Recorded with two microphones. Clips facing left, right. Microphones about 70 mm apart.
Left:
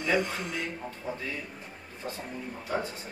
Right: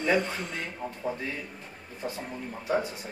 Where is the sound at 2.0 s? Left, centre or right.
Centre.